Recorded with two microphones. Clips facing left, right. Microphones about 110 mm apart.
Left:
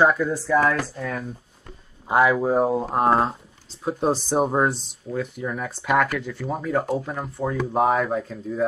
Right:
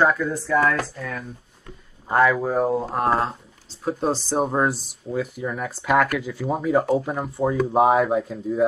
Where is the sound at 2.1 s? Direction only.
15° left (ahead or behind).